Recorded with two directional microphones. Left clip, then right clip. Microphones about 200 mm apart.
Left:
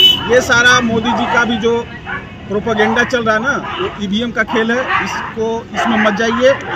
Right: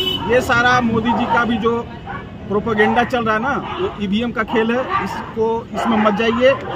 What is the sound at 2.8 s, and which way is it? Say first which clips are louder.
Speech: left 2 dB; 20° right (ahead or behind).